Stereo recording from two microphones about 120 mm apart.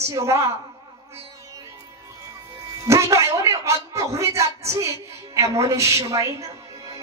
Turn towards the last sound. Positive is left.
turn(degrees=-25)  # may be behind; listen again after turning